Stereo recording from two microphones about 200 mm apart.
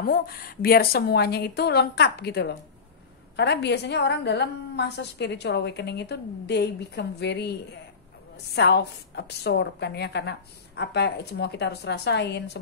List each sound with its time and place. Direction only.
0.0 s a woman's voice: 50° left (ahead or behind)
8.5 s a woman's voice: 55° left (ahead or behind)